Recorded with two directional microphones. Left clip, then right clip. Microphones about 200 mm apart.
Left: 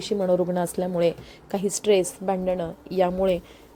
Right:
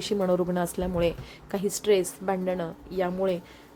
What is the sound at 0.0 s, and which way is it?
A woman's voice, centre (ahead or behind).